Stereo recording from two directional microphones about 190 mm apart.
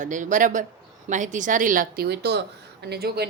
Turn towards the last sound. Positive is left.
turn(degrees=-60)  # may be behind; listen again after turning